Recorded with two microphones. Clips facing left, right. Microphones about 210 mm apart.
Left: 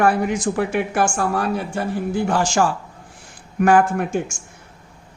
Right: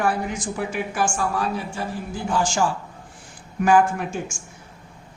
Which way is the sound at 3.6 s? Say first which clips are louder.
Left 2 dB; 60° left (ahead or behind).